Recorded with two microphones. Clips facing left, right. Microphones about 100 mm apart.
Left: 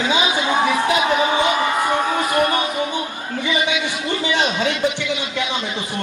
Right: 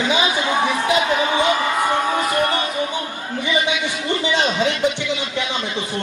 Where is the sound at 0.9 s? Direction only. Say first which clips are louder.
Left 1 dB; 20° left (ahead or behind).